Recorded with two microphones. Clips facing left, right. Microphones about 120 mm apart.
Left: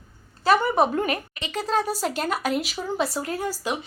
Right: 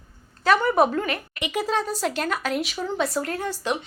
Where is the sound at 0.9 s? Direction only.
30° left (ahead or behind).